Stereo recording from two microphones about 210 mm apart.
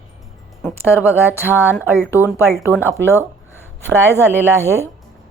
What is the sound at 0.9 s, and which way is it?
Speech, 10° left (ahead or behind).